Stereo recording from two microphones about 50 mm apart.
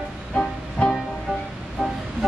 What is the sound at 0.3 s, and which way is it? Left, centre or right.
Music, centre.